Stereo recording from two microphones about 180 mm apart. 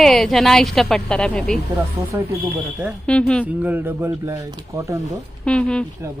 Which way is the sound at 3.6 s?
10° right (ahead or behind).